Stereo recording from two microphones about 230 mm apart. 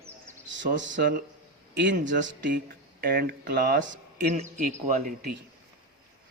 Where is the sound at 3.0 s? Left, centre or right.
Right.